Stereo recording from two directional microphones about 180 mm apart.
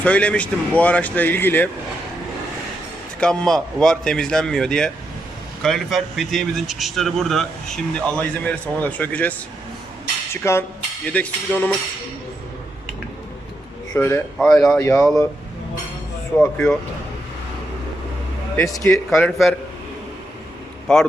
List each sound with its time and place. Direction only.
0.0 s speech: 5° left (ahead or behind)
3.2 s speech: 5° left (ahead or behind)
10.4 s speech: 15° left (ahead or behind)
13.9 s speech: 15° left (ahead or behind)
14.3 s speech: centre (ahead or behind)
14.8 s speech: 15° left (ahead or behind)
16.4 s speech: 10° left (ahead or behind)
18.5 s speech: 15° left (ahead or behind)
18.9 s speech: 5° left (ahead or behind)
20.9 s speech: 5° left (ahead or behind)